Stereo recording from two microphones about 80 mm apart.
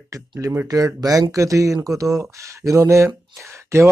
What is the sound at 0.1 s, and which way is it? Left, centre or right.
Speech, right.